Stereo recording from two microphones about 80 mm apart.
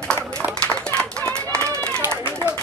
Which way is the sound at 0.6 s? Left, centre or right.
Centre.